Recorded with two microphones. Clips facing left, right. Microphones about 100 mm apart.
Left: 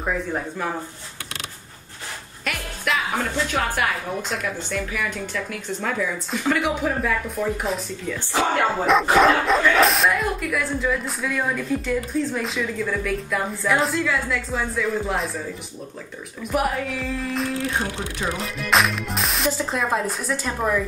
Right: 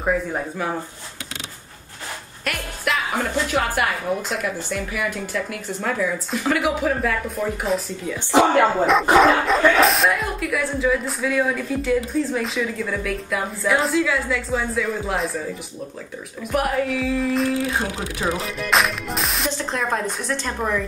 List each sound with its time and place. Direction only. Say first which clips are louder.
0.0 s speech: right 3 dB; 10° right (ahead or behind)
2.4 s speech: right 1 dB; centre (ahead or behind)
8.8 s speech: left 1 dB; centre (ahead or behind)
16.4 s speech: right 2 dB; centre (ahead or behind)